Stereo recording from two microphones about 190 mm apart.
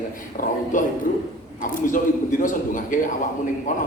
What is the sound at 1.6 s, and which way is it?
A man's voice, 45° left (ahead or behind).